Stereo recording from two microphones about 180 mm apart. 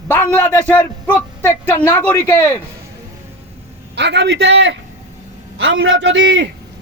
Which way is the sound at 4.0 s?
70° right (ahead or behind).